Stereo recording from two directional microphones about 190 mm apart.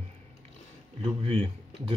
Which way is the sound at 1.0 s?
30° right (ahead or behind).